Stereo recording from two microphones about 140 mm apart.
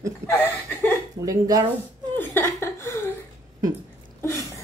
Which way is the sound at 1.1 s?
25° right (ahead or behind).